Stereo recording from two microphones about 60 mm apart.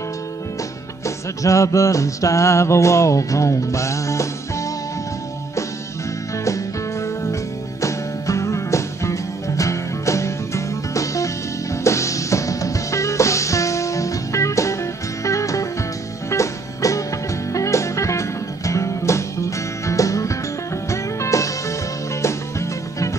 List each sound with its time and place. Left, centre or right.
1.0 s music: left
7.8 s music: left